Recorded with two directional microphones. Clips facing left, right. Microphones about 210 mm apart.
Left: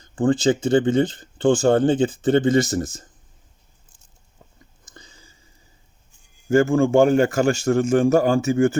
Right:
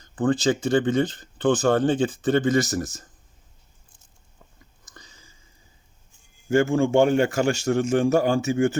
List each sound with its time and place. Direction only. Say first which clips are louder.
0.2 s speech: left 3 dB; 30° left (ahead or behind)
4.9 s a sound: left 3 dB; 30° left (ahead or behind)
6.5 s a man's voice: left 3 dB; 45° left (ahead or behind)